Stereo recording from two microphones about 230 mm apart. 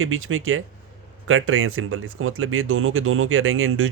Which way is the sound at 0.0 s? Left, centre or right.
Right.